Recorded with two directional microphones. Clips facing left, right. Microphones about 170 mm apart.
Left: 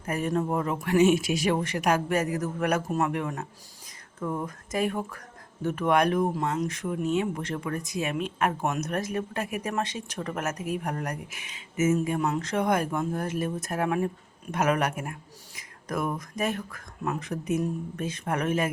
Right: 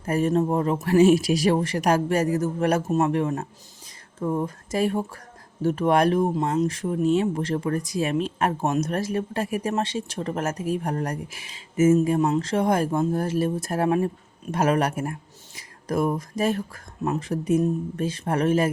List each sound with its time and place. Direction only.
0.0 s speech: 30° right (ahead or behind)